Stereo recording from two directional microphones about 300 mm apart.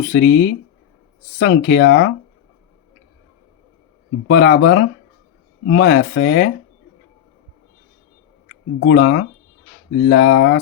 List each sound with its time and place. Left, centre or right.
0.0 s speech: left
4.3 s speech: left
8.8 s speech: left